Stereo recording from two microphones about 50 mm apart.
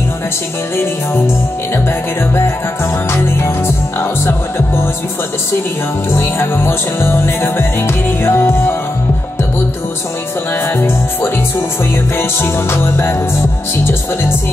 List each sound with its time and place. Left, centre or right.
2.3 s music: left
6.1 s music: left
12.2 s music: left